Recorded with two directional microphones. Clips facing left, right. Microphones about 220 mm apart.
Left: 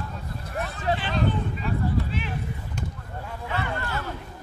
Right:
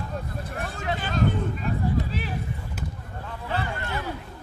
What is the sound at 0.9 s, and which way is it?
Vehicle, 45° right (ahead or behind).